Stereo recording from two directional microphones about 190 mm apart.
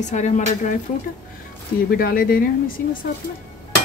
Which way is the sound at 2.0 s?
50° left (ahead or behind).